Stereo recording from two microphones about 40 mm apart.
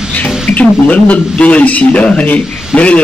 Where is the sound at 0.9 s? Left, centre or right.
Left.